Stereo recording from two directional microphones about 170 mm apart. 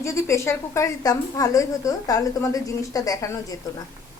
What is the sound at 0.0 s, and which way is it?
A woman's voice, 15° left (ahead or behind).